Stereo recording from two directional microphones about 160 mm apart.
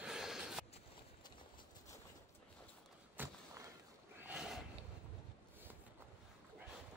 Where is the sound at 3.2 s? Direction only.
10° right (ahead or behind).